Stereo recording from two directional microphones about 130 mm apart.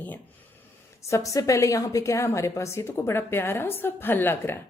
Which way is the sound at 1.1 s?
25° left (ahead or behind).